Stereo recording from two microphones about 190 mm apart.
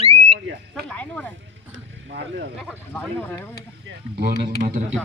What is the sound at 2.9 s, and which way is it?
Speech, 10° left (ahead or behind).